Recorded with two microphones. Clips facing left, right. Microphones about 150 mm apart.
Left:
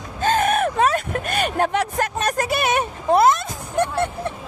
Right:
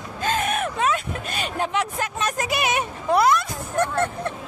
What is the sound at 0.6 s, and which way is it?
Vehicle, 40° left (ahead or behind).